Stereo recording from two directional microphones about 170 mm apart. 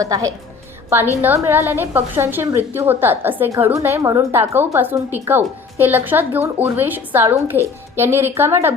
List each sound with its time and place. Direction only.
0.0 s a woman's voice: 20° right (ahead or behind)